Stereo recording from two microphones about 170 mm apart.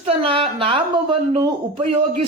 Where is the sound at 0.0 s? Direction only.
35° right (ahead or behind).